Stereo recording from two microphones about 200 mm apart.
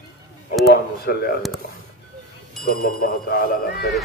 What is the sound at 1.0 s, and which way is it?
Speech, 50° left (ahead or behind).